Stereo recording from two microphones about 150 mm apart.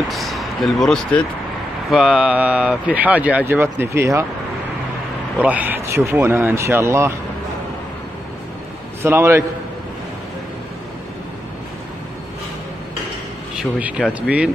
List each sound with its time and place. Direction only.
0.1 s basketball bounce: centre (ahead or behind)
1.9 s speech: 5° right (ahead or behind)
5.4 s speech: 10° right (ahead or behind)
9.0 s speech: 15° right (ahead or behind)
13.6 s speech: 10° right (ahead or behind)